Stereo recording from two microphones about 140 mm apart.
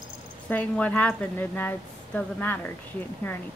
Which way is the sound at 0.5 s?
10° left (ahead or behind).